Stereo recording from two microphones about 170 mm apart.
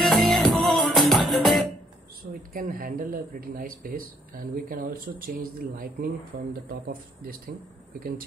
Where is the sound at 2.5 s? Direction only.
55° right (ahead or behind).